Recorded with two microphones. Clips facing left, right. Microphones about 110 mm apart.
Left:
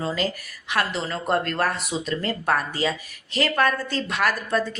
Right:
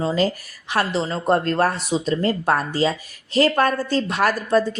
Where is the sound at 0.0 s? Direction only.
25° right (ahead or behind).